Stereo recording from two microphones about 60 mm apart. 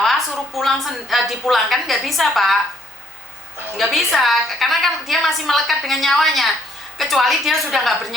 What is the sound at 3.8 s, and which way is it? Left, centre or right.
A woman's voice, centre.